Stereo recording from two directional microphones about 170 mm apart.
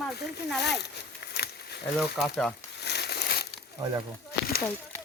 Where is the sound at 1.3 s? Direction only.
75° left (ahead or behind).